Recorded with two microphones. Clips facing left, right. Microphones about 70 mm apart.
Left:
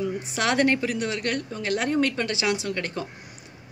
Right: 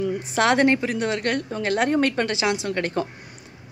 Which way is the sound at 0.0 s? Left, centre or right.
Right.